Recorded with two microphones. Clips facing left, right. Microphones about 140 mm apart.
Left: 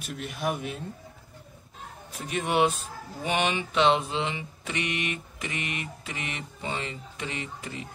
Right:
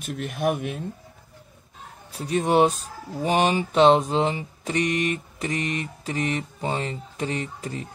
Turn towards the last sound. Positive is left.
turn(degrees=-40)  # may be behind; listen again after turning